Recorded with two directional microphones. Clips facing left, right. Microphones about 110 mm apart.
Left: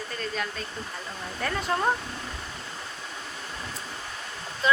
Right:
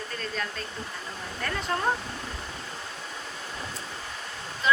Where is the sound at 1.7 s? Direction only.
15° left (ahead or behind).